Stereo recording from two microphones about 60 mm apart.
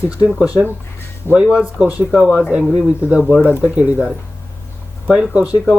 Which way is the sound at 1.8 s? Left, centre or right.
Right.